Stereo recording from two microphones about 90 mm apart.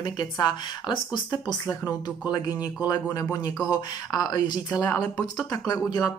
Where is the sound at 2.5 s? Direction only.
20° right (ahead or behind).